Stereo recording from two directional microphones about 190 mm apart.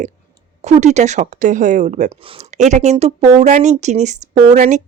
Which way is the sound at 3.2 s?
15° right (ahead or behind).